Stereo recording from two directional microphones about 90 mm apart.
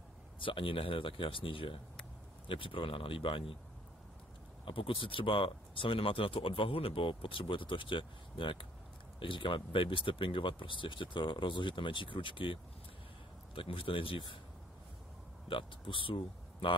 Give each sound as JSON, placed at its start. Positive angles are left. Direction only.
{"t": 0.4, "sound": "speech", "side_deg": 75}
{"t": 4.6, "sound": "speech", "side_deg": 70}
{"t": 13.6, "sound": "speech", "side_deg": 85}
{"t": 15.4, "sound": "speech", "side_deg": 75}